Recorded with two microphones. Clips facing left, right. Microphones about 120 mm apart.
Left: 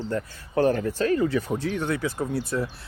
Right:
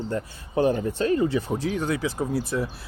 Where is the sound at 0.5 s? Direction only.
15° right (ahead or behind).